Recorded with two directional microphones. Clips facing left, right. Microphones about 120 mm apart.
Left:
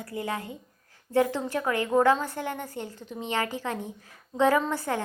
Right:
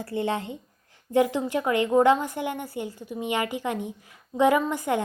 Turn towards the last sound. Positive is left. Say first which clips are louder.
# right 2 dB
turn(degrees=-15)  # may be behind; listen again after turning